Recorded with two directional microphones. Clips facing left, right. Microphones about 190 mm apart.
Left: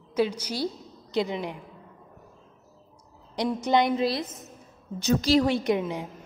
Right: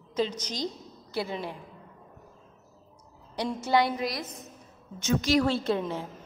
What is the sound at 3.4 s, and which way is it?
A woman's voice, 15° left (ahead or behind).